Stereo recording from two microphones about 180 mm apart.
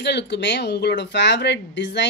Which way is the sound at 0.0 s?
70° left (ahead or behind).